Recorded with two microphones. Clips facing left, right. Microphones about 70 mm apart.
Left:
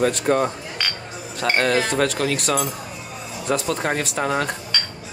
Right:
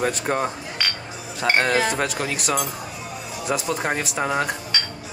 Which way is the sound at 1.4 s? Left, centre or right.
Centre.